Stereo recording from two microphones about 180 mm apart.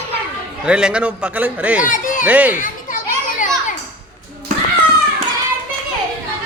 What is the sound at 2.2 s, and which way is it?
Speech, 10° right (ahead or behind).